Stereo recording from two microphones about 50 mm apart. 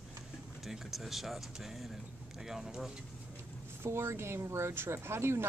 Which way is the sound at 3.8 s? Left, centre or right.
Right.